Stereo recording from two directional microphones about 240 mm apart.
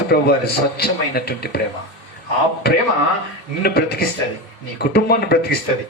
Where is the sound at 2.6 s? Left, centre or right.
Left.